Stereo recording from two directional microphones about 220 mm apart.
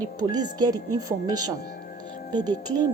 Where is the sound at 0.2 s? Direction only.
20° right (ahead or behind).